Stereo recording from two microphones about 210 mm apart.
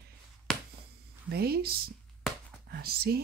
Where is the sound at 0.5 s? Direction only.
5° left (ahead or behind).